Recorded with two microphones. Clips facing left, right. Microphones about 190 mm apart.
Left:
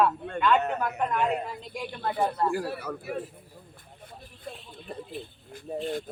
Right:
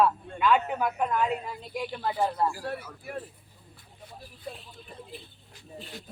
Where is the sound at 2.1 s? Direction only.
60° left (ahead or behind).